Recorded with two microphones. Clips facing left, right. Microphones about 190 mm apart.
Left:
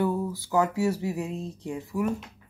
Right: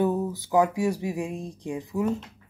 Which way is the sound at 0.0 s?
20° right (ahead or behind).